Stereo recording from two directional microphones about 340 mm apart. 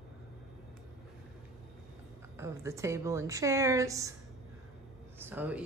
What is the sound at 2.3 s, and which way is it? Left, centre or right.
A woman's voice, centre.